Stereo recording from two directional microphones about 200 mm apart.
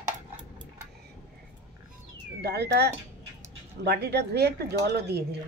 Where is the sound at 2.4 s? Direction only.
55° right (ahead or behind).